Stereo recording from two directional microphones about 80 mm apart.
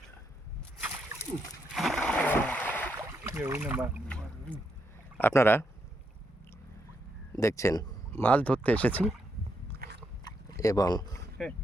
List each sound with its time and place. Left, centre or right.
0.8 s slosh: right
1.7 s splash: centre
2.0 s splash: centre
2.3 s a sound: centre
3.3 s speech: right
3.7 s speech: right
4.1 s boat: centre
5.3 s speech: left
7.3 s speech: left
8.2 s speech: centre
10.6 s speech: left
11.4 s speech: centre